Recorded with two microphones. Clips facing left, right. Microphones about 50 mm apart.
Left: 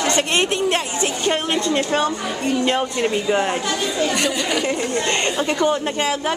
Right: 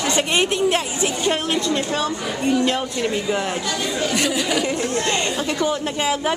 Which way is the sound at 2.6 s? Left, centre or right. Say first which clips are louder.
Left 2 dB; centre.